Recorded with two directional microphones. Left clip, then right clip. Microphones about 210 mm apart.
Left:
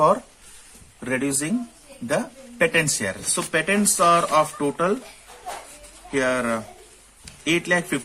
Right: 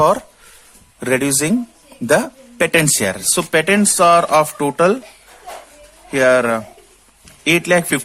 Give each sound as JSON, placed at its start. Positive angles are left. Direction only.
{"t": 0.9, "sound": "speech", "side_deg": -55}
{"t": 6.1, "sound": "speech", "side_deg": -50}